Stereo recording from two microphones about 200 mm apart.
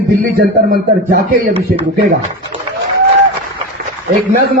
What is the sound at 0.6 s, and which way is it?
Speech, 50° right (ahead or behind).